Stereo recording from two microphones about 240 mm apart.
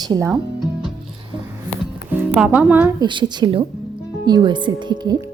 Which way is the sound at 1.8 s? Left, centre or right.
Centre.